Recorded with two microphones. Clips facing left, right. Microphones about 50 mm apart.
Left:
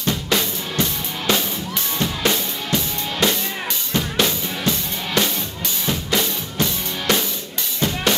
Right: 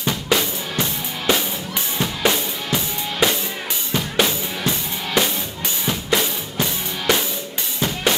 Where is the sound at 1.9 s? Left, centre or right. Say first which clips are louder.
Right 1 dB; centre.